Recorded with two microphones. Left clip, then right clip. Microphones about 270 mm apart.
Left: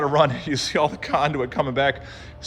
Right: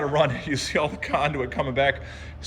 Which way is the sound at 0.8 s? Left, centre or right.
Left.